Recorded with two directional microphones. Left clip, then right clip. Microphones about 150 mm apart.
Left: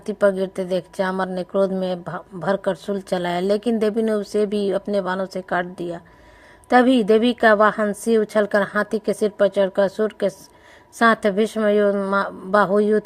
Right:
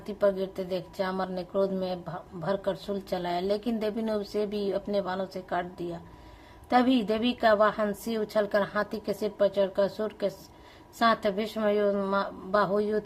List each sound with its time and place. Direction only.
0.0 s a woman's voice: 45° left (ahead or behind)
12.1 s a woman's voice: 45° left (ahead or behind)